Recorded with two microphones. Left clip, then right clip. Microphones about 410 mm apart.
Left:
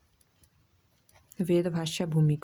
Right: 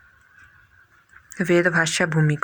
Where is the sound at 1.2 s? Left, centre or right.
Left.